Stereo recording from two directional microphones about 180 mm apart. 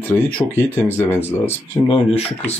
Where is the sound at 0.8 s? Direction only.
10° left (ahead or behind).